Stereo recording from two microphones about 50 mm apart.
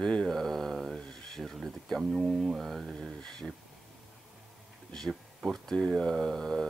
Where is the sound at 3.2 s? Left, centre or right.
Centre.